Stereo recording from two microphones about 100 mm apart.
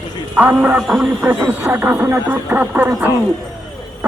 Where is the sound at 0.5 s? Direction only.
15° right (ahead or behind).